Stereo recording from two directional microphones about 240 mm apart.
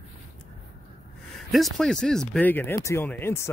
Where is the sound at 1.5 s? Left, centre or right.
Centre.